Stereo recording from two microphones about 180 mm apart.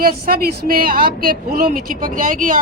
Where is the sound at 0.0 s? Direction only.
55° right (ahead or behind).